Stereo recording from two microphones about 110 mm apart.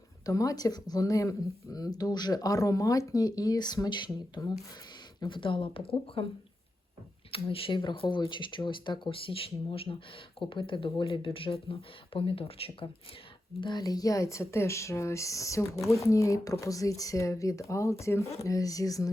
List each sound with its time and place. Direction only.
0.3 s speech: 30° left (ahead or behind)
5.2 s speech: 50° left (ahead or behind)
7.3 s speech: 60° left (ahead or behind)
13.6 s speech: 40° left (ahead or behind)